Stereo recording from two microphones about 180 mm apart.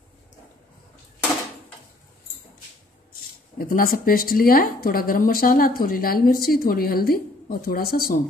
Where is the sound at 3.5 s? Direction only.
55° left (ahead or behind).